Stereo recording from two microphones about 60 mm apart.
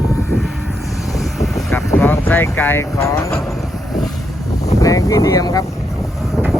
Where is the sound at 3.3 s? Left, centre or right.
Centre.